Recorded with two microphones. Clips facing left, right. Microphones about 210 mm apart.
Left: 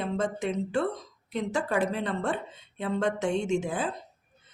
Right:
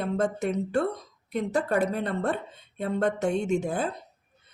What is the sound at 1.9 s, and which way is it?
Speech, 40° right (ahead or behind).